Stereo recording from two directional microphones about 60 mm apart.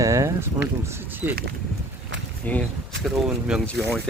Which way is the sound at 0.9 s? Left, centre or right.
Right.